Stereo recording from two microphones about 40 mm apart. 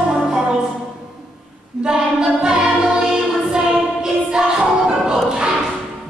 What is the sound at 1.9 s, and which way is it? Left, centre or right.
Music, centre.